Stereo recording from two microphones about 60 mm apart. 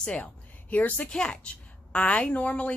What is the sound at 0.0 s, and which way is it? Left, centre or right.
Speech, left.